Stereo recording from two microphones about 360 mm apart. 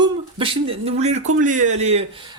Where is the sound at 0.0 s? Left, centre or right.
Centre.